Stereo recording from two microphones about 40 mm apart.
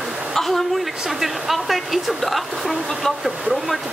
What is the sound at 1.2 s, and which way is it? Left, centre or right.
Speech, centre.